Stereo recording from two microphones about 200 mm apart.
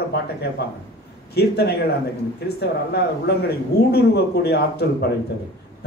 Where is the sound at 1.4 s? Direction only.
55° left (ahead or behind).